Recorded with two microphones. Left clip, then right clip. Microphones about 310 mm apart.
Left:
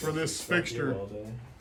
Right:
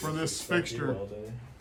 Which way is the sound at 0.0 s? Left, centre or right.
Centre.